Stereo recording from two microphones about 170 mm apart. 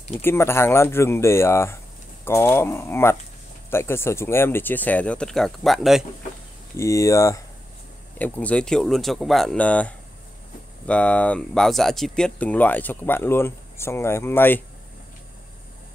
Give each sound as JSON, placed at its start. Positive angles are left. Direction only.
{"t": 0.1, "sound": "speech", "side_deg": 15}
{"t": 6.8, "sound": "speech", "side_deg": 20}
{"t": 8.2, "sound": "speech", "side_deg": 10}